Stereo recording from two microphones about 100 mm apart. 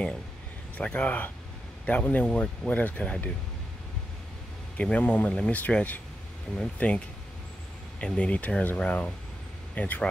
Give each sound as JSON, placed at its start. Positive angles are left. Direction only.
{"t": 0.7, "sound": "speech", "side_deg": 15}
{"t": 4.7, "sound": "speech", "side_deg": 10}
{"t": 8.0, "sound": "speech", "side_deg": 10}